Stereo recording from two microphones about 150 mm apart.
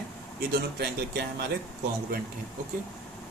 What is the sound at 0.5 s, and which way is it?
Speech, 90° right.